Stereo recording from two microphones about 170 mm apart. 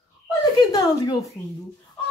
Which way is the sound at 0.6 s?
25° left (ahead or behind).